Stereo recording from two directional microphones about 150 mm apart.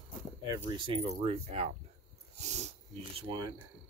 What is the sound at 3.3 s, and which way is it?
Speech, 30° right (ahead or behind).